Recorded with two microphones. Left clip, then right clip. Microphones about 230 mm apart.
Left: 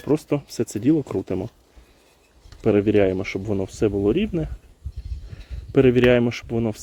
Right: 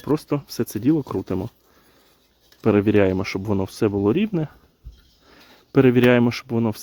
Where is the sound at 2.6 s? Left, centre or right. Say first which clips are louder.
Even; centre.